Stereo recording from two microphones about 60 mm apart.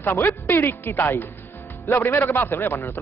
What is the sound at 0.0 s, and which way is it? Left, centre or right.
Speech, left.